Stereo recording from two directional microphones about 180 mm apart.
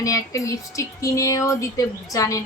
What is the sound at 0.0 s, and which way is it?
A woman's voice, 15° left (ahead or behind).